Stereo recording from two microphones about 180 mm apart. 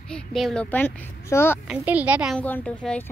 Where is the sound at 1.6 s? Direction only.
5° right (ahead or behind).